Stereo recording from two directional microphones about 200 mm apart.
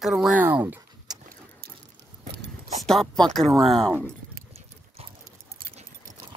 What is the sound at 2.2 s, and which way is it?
Dog, 55° right (ahead or behind).